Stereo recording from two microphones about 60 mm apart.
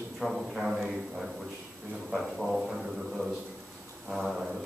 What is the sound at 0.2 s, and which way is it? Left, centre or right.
A man's voice, centre.